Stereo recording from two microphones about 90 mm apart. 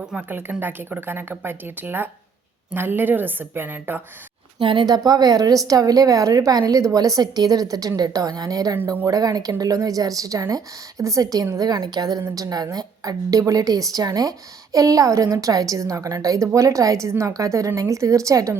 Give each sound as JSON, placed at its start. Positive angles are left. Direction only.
{"t": 0.1, "sound": "speech", "side_deg": -20}
{"t": 4.6, "sound": "a woman's voice", "side_deg": -65}